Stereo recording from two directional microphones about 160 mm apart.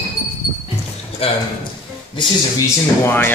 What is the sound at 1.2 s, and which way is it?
Speech, 35° left (ahead or behind).